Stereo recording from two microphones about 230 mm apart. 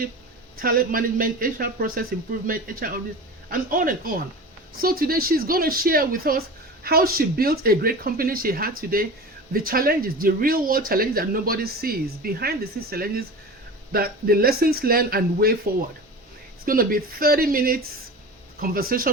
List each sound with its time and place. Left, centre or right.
0.6 s speech: right
16.6 s speech: right